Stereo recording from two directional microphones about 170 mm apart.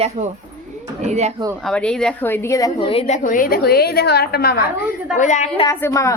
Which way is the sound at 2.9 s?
45° left (ahead or behind).